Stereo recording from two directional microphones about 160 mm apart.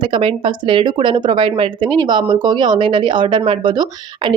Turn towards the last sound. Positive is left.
turn(degrees=-35)  # may be behind; listen again after turning